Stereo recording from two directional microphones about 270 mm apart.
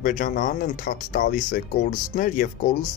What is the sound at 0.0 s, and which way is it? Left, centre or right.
Speech, left.